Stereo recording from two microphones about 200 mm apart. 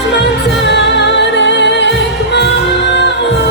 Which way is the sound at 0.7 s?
60° left (ahead or behind).